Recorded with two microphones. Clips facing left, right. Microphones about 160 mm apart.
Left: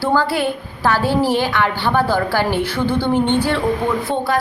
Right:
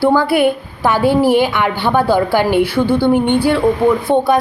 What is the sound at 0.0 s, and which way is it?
A woman's voice, 15° right (ahead or behind).